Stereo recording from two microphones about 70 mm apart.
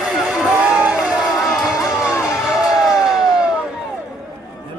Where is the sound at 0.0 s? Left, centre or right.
Centre.